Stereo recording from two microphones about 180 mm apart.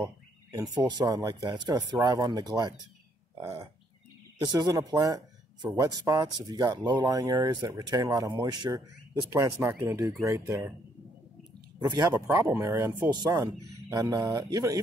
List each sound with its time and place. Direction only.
0.0 s speech: 20° right (ahead or behind)
3.3 s a sound: 15° right (ahead or behind)
4.5 s speech: 20° right (ahead or behind)
11.8 s speech: 20° right (ahead or behind)